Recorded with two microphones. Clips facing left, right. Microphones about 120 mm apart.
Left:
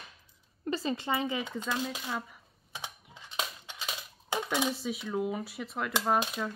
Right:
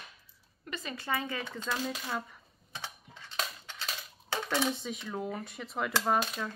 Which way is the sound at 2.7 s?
15° left (ahead or behind).